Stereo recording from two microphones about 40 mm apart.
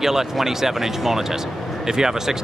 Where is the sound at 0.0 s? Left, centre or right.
Centre.